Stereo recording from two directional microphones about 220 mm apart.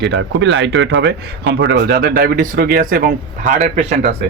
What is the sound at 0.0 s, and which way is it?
Speech, 50° right (ahead or behind).